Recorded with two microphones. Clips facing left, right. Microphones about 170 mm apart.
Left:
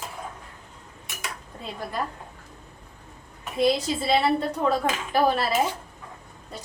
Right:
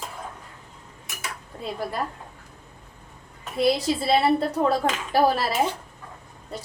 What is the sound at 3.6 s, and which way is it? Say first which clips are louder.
Speech: right 1 dB; 35° right (ahead or behind).